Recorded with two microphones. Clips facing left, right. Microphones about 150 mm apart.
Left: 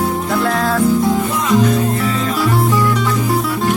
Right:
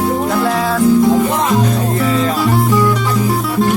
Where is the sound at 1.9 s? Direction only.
Centre (ahead or behind).